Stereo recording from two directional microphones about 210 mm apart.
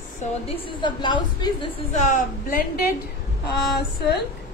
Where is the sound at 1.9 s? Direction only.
35° left (ahead or behind).